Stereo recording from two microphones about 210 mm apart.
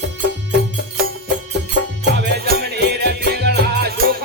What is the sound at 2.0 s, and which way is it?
Music, 55° right (ahead or behind).